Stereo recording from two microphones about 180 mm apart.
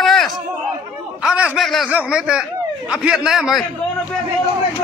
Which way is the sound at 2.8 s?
5° right (ahead or behind).